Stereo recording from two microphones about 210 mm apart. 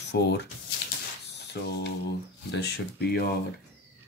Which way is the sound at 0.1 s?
50° left (ahead or behind).